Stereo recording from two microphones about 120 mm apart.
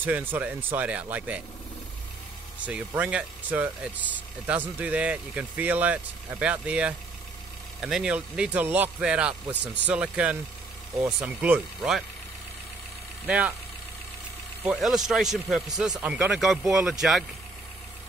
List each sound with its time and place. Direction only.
0.0 s speech: 15° right (ahead or behind)
3.0 s speech: 10° right (ahead or behind)
14.6 s speech: 5° right (ahead or behind)